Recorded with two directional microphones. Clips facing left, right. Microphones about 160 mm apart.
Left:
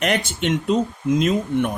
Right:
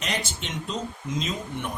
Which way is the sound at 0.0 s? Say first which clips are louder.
Left 10 dB; 60° left (ahead or behind).